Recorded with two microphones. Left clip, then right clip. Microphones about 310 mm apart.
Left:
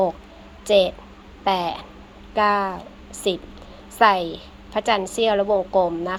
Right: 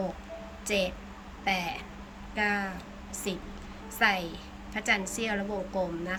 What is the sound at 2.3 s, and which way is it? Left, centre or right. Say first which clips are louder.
Speech: left 10 dB; left.